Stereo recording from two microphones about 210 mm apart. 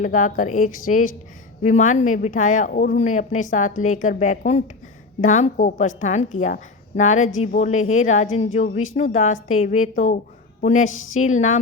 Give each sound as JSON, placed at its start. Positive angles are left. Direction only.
{"t": 0.0, "sound": "a woman's voice", "side_deg": 35}
{"t": 7.2, "sound": "speech", "side_deg": 70}
{"t": 7.4, "sound": "a woman's voice", "side_deg": 35}